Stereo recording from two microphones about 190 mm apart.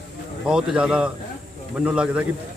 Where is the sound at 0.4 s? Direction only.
5° right (ahead or behind).